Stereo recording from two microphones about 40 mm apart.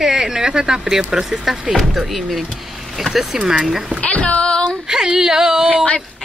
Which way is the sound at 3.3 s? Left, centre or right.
Centre.